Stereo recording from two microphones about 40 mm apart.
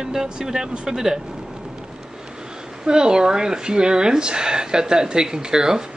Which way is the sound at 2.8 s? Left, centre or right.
Centre.